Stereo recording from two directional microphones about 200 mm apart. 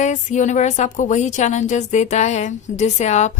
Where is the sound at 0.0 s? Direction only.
35° left (ahead or behind).